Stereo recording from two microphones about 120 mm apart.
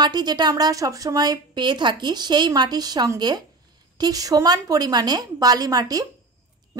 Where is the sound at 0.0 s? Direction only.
35° right (ahead or behind).